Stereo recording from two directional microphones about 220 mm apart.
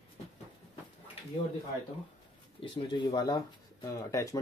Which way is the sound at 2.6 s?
20° left (ahead or behind).